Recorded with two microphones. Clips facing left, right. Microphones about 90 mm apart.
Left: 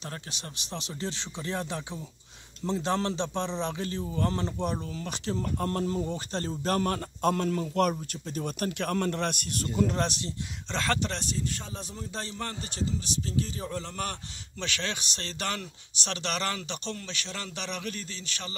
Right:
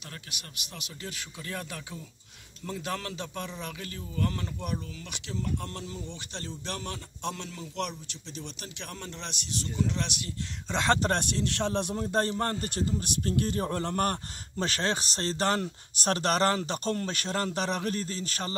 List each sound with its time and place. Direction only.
0.1 s a man's voice: 30° left (ahead or behind)
10.7 s speech: 20° right (ahead or behind)
11.0 s a man's voice: 55° right (ahead or behind)